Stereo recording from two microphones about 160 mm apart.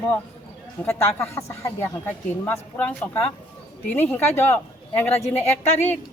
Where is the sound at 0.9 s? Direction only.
15° left (ahead or behind).